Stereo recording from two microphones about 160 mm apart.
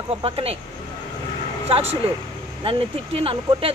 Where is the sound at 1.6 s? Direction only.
35° right (ahead or behind).